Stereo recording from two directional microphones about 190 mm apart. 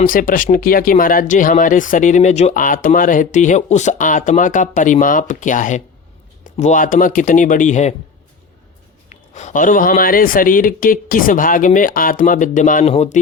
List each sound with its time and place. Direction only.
0.0 s speech: 45° left (ahead or behind)
9.0 s speech: 40° left (ahead or behind)